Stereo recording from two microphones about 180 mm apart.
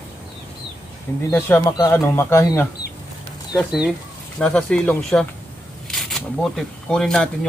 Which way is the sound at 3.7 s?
5° right (ahead or behind).